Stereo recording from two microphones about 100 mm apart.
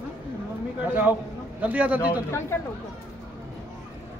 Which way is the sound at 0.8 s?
15° right (ahead or behind).